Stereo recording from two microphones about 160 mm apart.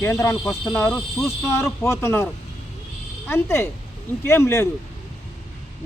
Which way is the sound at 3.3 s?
15° left (ahead or behind).